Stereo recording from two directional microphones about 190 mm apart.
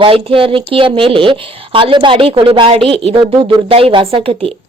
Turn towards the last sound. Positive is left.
turn(degrees=-30)  # may be behind; listen again after turning